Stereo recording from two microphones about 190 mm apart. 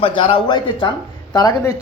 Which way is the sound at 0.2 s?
25° left (ahead or behind).